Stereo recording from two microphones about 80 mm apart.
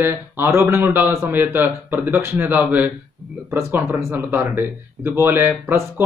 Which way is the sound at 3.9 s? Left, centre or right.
Right.